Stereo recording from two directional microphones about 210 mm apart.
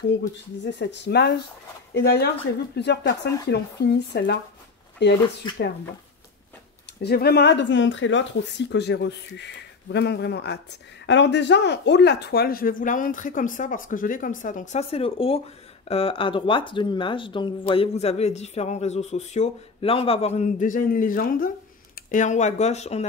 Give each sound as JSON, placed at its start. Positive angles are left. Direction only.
{"t": 0.7, "sound": "speech", "side_deg": 55}
{"t": 5.4, "sound": "speech", "side_deg": 20}
{"t": 7.0, "sound": "speech", "side_deg": 50}